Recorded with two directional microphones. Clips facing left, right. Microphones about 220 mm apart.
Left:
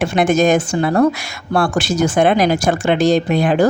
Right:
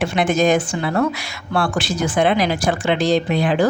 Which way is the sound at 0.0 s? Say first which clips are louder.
Left 3 dB; 45° left (ahead or behind).